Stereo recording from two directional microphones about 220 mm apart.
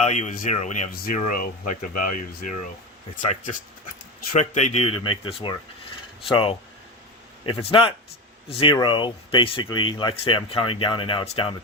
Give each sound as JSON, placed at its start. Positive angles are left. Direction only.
{"t": 0.0, "sound": "speech", "side_deg": 35}